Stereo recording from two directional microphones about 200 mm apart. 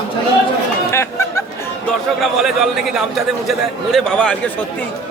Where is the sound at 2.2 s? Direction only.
Centre (ahead or behind).